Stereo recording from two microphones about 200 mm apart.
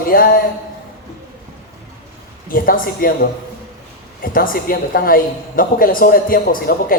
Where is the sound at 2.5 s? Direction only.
45° left (ahead or behind).